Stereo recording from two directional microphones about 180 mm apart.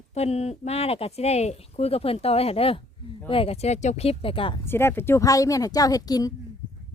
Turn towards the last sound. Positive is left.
turn(degrees=20)  # may be behind; listen again after turning